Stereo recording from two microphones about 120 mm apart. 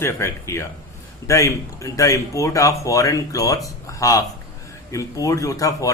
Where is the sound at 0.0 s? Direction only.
20° left (ahead or behind).